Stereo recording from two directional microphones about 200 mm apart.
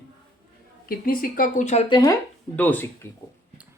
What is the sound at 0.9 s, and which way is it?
Speech, 45° left (ahead or behind).